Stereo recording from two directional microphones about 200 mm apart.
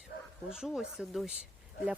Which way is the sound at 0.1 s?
60° left (ahead or behind).